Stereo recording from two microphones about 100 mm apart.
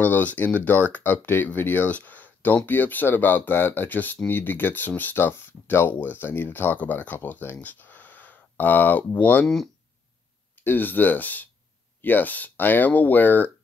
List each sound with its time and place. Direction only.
0.0 s speech: 15° left (ahead or behind)
10.6 s speech: 20° left (ahead or behind)